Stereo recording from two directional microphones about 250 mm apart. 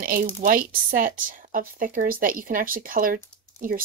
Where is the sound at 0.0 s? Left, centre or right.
Right.